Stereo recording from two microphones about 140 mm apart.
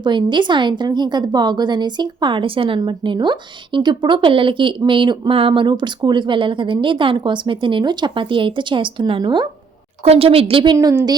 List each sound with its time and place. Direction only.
0.0 s a woman's voice: 35° right (ahead or behind)
10.0 s a woman's voice: 45° right (ahead or behind)
10.8 s speech: 25° right (ahead or behind)